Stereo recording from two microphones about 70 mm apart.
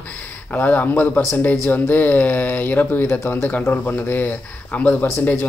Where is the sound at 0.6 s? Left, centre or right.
Left.